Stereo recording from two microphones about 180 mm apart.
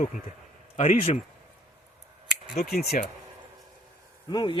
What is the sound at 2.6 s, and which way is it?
Speech, 55° left (ahead or behind).